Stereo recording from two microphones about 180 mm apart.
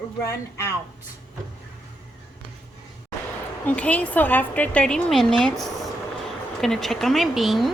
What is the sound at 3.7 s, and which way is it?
Speech, 10° left (ahead or behind).